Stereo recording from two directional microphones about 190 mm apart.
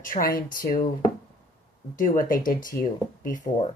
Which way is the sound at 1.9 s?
45° left (ahead or behind).